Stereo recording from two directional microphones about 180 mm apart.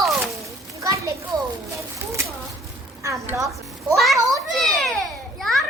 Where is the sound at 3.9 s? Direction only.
Centre (ahead or behind).